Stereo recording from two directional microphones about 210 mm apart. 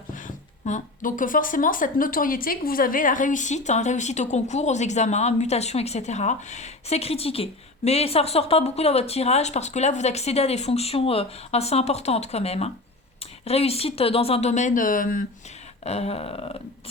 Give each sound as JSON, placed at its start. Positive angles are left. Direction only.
{"t": 0.1, "sound": "speech", "side_deg": 40}
{"t": 15.8, "sound": "speech", "side_deg": 30}